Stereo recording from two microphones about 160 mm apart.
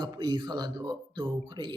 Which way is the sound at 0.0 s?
25° right (ahead or behind).